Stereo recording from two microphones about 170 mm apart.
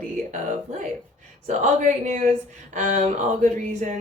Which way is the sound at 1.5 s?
45° right (ahead or behind).